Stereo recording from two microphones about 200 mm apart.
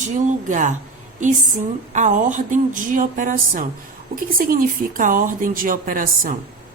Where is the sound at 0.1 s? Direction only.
40° right (ahead or behind).